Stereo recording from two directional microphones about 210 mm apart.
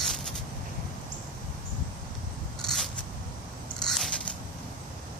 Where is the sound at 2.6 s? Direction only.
Centre (ahead or behind).